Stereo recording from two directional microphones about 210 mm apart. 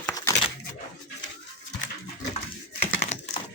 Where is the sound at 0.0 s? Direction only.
15° left (ahead or behind).